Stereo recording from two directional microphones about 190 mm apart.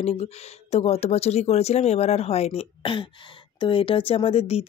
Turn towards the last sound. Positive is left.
turn(degrees=30)  # may be behind; listen again after turning